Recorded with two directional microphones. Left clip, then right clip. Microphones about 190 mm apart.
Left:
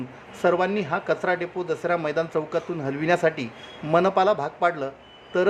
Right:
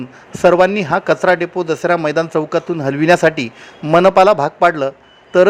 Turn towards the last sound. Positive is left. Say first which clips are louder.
# right 12 dB
turn(degrees=-40)  # may be behind; listen again after turning